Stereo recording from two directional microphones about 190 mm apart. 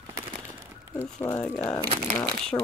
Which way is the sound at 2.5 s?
15° left (ahead or behind).